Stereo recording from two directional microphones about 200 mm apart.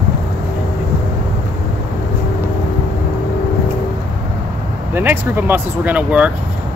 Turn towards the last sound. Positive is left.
turn(degrees=-5)  # may be behind; listen again after turning